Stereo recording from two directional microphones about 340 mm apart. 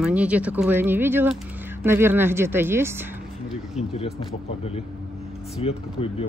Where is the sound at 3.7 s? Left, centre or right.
Centre.